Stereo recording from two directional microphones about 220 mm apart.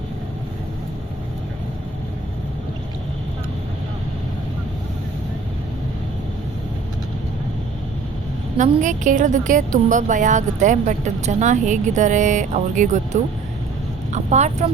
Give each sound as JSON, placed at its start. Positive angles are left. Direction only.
{"t": 8.5, "sound": "a woman's voice", "side_deg": -35}
{"t": 14.1, "sound": "a woman's voice", "side_deg": -30}